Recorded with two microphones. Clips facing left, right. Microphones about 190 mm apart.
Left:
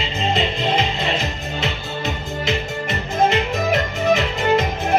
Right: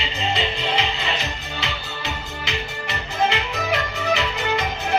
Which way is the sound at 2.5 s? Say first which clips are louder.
Left 6 dB; 45° left (ahead or behind).